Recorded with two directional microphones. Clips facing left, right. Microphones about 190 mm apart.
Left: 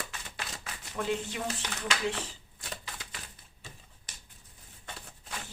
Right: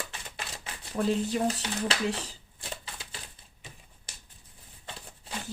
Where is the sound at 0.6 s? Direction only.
35° right (ahead or behind).